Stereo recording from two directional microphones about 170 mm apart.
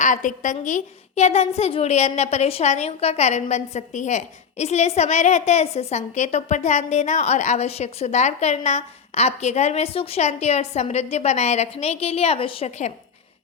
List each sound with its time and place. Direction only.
0.0 s a woman's voice: 50° left (ahead or behind)